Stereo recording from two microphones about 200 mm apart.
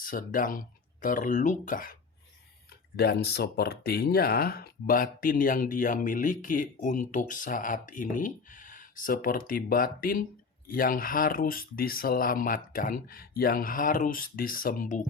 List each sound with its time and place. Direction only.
0.0 s speech: 45° left (ahead or behind)